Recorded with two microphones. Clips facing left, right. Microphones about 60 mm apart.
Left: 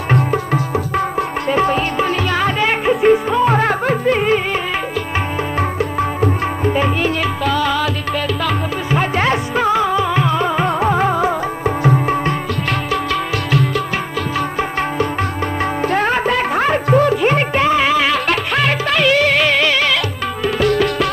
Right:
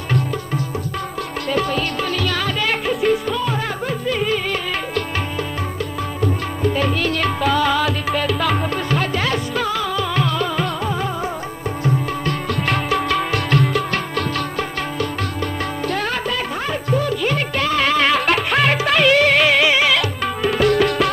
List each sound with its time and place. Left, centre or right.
1.5 s music: left
3.5 s music: left
5.6 s music: left
6.6 s music: left
7.2 s music: centre
9.1 s music: left
10.8 s music: left
12.9 s music: centre
14.6 s music: left
16.3 s music: left
17.2 s music: left
17.6 s music: centre